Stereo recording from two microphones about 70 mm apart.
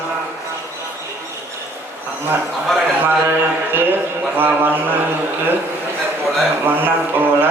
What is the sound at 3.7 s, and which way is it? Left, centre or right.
Speech, right.